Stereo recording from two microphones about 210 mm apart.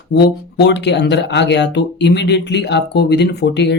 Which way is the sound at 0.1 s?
55° left (ahead or behind).